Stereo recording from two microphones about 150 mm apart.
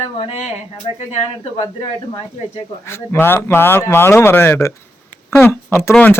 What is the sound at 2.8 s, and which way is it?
Speech, 15° left (ahead or behind).